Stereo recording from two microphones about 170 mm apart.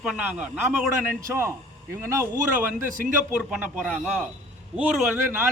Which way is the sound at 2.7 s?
50° right (ahead or behind).